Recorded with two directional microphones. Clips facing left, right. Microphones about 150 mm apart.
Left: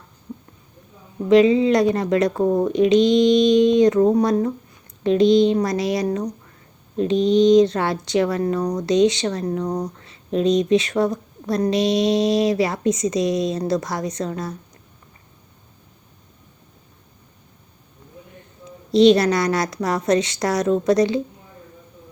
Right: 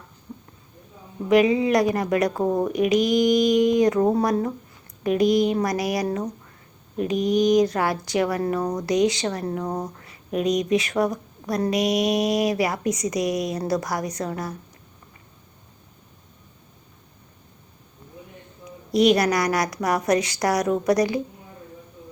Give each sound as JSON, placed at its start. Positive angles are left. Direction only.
{"t": 1.3, "sound": "speech", "side_deg": 25}
{"t": 2.3, "sound": "speech", "side_deg": -5}
{"t": 2.6, "sound": "speech", "side_deg": 25}
{"t": 8.4, "sound": "speech", "side_deg": -25}
{"t": 8.9, "sound": "speech", "side_deg": 25}
{"t": 9.6, "sound": "speech", "side_deg": -5}
{"t": 10.0, "sound": "speech", "side_deg": 25}
{"t": 18.9, "sound": "speech", "side_deg": 25}